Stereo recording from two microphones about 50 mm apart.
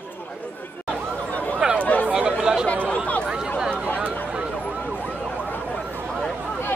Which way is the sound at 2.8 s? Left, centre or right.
Left.